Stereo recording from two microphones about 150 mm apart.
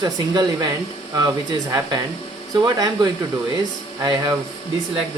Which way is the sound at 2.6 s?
25° right (ahead or behind).